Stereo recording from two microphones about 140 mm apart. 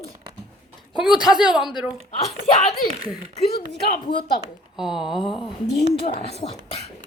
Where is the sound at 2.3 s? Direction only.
50° left (ahead or behind).